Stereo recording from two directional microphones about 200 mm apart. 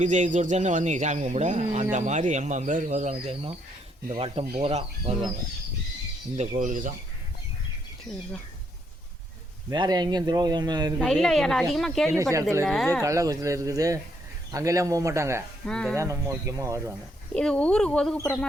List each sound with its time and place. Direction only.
0.0 s speech: 35° right (ahead or behind)
6.3 s speech: 35° right (ahead or behind)
8.1 s speech: centre (ahead or behind)
9.6 s speech: 20° right (ahead or behind)
11.0 s speech: centre (ahead or behind)
12.1 s speech: 15° right (ahead or behind)
12.6 s speech: centre (ahead or behind)
13.0 s speech: 15° right (ahead or behind)
15.6 s speech: 5° left (ahead or behind)
16.0 s speech: 15° right (ahead or behind)
17.3 s speech: 5° left (ahead or behind)